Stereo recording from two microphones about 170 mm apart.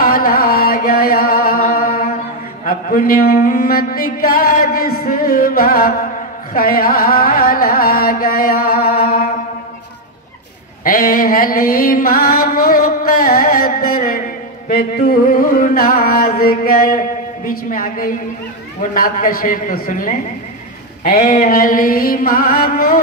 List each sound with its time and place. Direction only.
0.1 s music: 60° left (ahead or behind)
2.6 s mantra: 50° left (ahead or behind)
10.8 s music: 60° left (ahead or behind)
15.6 s mantra: 60° left (ahead or behind)
17.5 s a man's voice: 55° left (ahead or behind)
21.0 s mantra: 55° left (ahead or behind)